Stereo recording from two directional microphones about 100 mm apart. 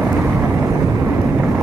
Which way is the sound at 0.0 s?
10° right (ahead or behind).